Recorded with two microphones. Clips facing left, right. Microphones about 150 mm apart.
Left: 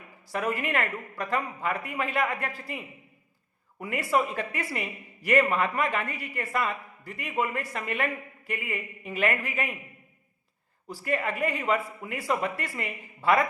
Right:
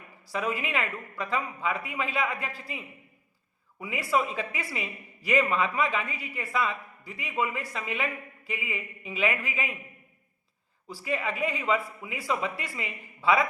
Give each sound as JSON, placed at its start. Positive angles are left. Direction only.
{"t": 0.3, "sound": "a man's voice", "side_deg": 60}
{"t": 11.0, "sound": "a man's voice", "side_deg": 55}